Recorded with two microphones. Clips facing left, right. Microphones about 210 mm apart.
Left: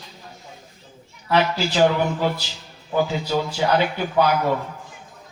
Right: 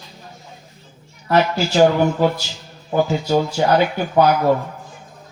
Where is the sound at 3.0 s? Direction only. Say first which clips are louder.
Right 5 dB; 45° right (ahead or behind).